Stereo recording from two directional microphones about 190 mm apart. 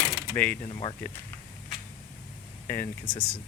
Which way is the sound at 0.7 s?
25° left (ahead or behind).